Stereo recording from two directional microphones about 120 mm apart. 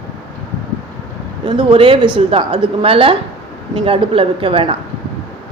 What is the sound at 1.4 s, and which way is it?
A woman's voice, 40° right (ahead or behind).